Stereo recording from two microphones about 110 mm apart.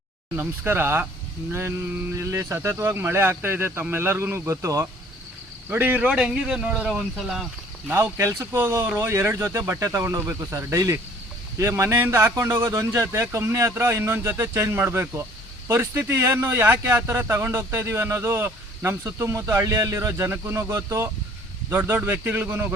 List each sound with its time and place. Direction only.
0.3 s speech: 20° right (ahead or behind)
8.0 s speech: 25° right (ahead or behind)